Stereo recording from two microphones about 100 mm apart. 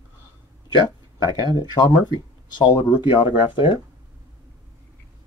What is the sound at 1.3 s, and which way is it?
Speech, 45° left (ahead or behind).